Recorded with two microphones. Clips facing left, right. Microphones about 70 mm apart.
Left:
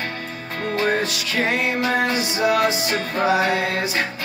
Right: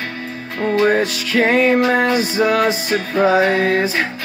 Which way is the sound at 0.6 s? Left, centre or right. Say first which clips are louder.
Right 6 dB; right.